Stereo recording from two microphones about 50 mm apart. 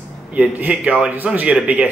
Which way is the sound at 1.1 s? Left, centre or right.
Right.